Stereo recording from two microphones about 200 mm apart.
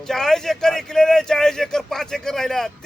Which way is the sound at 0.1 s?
Centre (ahead or behind).